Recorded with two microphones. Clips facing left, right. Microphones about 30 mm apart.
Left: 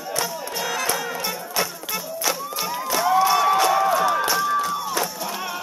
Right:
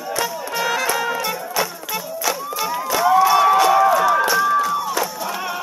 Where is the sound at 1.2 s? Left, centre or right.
Centre.